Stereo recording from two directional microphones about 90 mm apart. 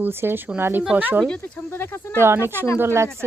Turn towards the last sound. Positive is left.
turn(degrees=-30)  # may be behind; listen again after turning